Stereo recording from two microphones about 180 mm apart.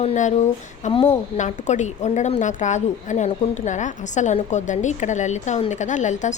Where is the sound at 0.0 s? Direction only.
40° left (ahead or behind).